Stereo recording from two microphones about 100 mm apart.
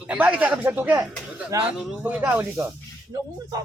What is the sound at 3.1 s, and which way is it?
Speech, 40° right (ahead or behind).